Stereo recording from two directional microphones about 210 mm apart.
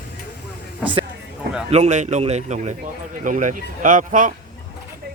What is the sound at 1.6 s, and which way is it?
Speech, 30° right (ahead or behind).